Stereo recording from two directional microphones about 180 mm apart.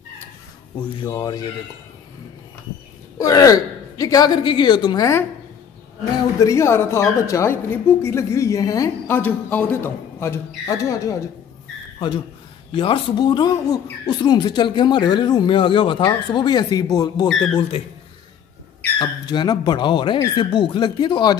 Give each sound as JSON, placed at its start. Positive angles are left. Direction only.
{"t": 1.0, "sound": "speech", "side_deg": 20}
{"t": 3.2, "sound": "speech", "side_deg": 20}
{"t": 6.4, "sound": "a woman's voice", "side_deg": 15}
{"t": 12.7, "sound": "speech", "side_deg": 30}
{"t": 17.6, "sound": "a man's voice", "side_deg": 35}
{"t": 18.9, "sound": "speech", "side_deg": 25}